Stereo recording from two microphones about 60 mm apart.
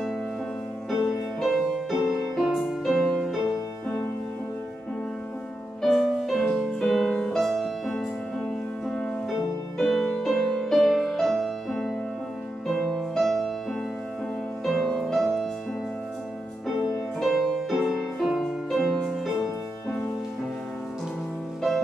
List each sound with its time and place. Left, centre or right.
0.8 s music: centre
5.8 s music: centre
8.8 s music: centre
9.8 s music: centre
15.0 s music: centre
17.2 s music: centre